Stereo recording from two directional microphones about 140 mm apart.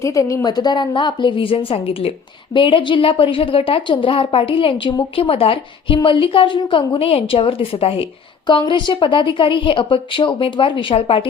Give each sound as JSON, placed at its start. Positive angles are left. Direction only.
{"t": 0.0, "sound": "speech", "side_deg": 20}
{"t": 8.4, "sound": "speech", "side_deg": 35}